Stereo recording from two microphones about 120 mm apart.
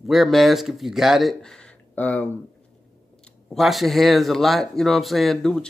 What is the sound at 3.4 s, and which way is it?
Speech, centre (ahead or behind).